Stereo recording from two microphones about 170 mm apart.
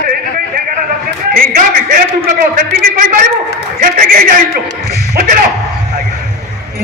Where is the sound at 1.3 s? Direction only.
55° right (ahead or behind).